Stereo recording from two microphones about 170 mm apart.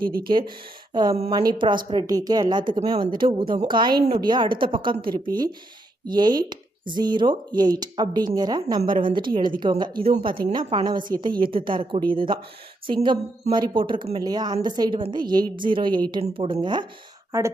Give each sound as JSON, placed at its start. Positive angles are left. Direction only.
{"t": 0.0, "sound": "speech", "side_deg": -60}
{"t": 0.3, "sound": "a woman's voice", "side_deg": -30}